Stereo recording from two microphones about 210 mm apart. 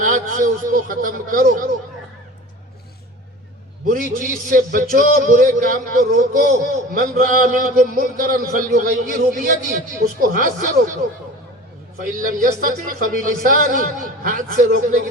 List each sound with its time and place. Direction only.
0.0 s a man's voice: 40° right (ahead or behind)
3.8 s a man's voice: 40° right (ahead or behind)
12.2 s a man's voice: 40° right (ahead or behind)